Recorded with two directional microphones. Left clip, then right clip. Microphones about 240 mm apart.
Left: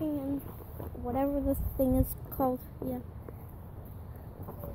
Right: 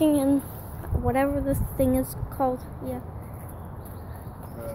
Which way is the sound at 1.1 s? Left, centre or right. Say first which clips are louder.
Right 6 dB; centre.